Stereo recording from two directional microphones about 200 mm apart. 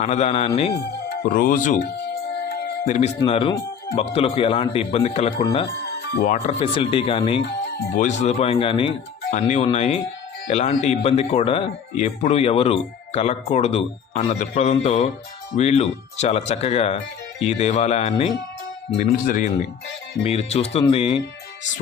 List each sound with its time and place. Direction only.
0.0 s speech: 35° left (ahead or behind)
1.2 s speech: 45° left (ahead or behind)
2.5 s music: 40° left (ahead or behind)
3.2 s a man's voice: 25° left (ahead or behind)
19.1 s speech: 45° left (ahead or behind)
20.2 s a man's voice: 30° left (ahead or behind)